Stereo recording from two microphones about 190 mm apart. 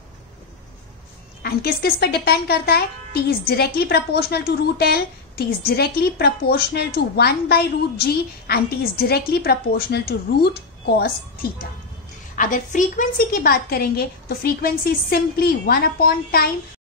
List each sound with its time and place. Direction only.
1.4 s speech: 55° left (ahead or behind)
12.4 s a woman's voice: 45° left (ahead or behind)